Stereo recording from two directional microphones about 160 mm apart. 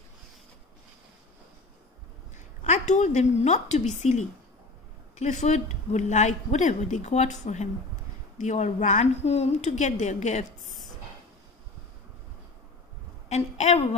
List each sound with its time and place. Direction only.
2.6 s a woman's voice: 45° left (ahead or behind)
13.3 s a woman's voice: 45° left (ahead or behind)